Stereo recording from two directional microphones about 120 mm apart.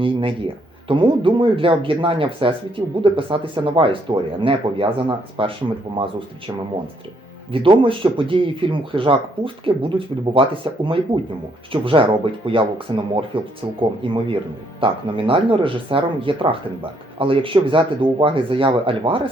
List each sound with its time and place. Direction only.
0.0 s speech: 45° right (ahead or behind)
7.5 s speech: 45° right (ahead or behind)